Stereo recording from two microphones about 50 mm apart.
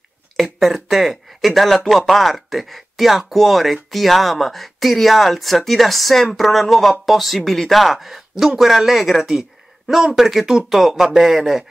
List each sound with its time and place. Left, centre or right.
0.4 s speech: centre